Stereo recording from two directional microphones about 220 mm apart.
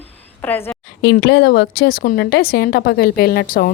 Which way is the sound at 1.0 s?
50° left (ahead or behind).